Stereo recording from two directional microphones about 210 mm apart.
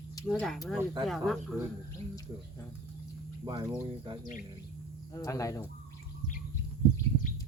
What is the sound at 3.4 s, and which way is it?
Speech, 15° right (ahead or behind).